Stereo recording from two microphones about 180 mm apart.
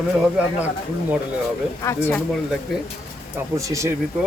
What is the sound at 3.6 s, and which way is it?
Speech, 15° right (ahead or behind).